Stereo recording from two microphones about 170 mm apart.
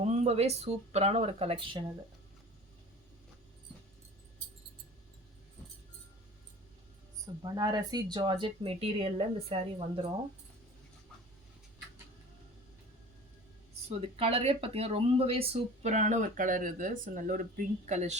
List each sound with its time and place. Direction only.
0.0 s speech: 40° right (ahead or behind)
7.4 s speech: 25° right (ahead or behind)
14.2 s speech: 35° right (ahead or behind); by 17.4 s 50° right (ahead or behind)
17.8 s speech: 40° right (ahead or behind)